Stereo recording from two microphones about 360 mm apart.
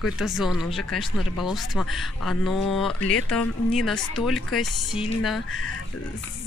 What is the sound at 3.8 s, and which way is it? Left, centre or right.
Speech, centre.